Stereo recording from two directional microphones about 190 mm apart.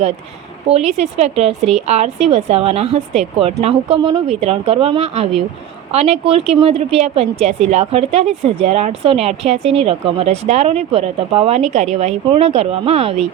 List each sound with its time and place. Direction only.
0.7 s a woman's voice: 35° right (ahead or behind)